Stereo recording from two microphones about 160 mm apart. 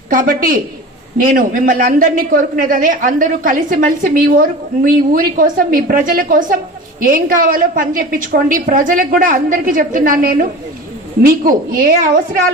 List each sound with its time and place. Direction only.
0.1 s a man's voice: 60° right (ahead or behind)